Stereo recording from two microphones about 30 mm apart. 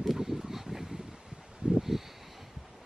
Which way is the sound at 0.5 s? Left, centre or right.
Centre.